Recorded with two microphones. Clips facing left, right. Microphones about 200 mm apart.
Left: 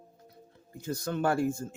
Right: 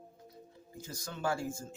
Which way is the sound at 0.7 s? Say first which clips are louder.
Left 12 dB; 60° left (ahead or behind).